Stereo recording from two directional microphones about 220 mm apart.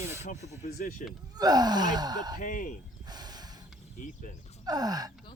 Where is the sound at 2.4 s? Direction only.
35° left (ahead or behind).